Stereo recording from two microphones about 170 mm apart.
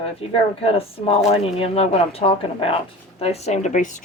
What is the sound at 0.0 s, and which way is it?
Speech, 35° left (ahead or behind).